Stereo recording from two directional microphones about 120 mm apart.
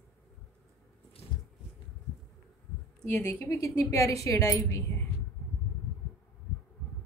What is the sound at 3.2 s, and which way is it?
A woman's voice, 25° left (ahead or behind).